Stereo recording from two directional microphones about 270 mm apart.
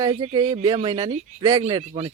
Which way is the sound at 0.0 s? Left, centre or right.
Centre.